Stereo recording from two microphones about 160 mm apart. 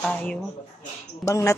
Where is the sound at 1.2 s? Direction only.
20° left (ahead or behind).